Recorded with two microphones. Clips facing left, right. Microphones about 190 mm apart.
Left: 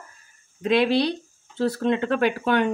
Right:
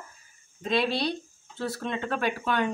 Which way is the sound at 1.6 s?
60° left (ahead or behind).